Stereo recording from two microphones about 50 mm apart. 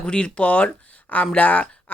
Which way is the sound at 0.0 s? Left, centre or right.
Centre.